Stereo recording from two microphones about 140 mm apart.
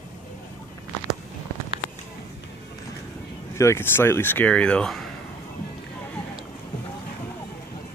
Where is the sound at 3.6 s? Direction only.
20° left (ahead or behind).